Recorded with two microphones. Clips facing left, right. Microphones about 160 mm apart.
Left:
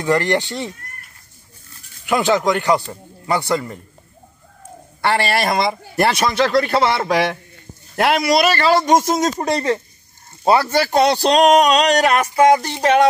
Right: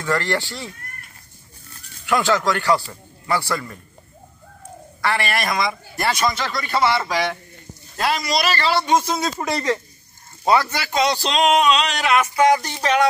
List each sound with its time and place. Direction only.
0.0 s speech: 20° left (ahead or behind)
2.0 s speech: 20° left (ahead or behind)
5.0 s a man's voice: 30° left (ahead or behind)
5.9 s a man's voice: 60° left (ahead or behind); by 10.7 s 30° left (ahead or behind)
10.7 s a man's voice: 55° left (ahead or behind)
11.5 s a man's voice: 40° left (ahead or behind)
12.4 s speech: 30° left (ahead or behind)